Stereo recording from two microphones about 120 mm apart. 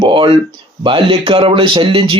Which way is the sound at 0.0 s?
45° right (ahead or behind).